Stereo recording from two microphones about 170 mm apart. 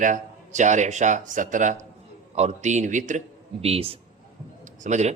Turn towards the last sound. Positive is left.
turn(degrees=-45)  # may be behind; listen again after turning